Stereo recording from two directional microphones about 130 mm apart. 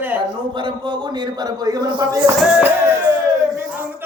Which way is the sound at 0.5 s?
40° right (ahead or behind).